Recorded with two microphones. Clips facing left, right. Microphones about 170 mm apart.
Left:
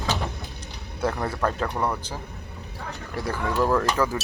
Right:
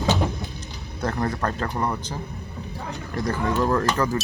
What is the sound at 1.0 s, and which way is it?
Speech, 5° left (ahead or behind).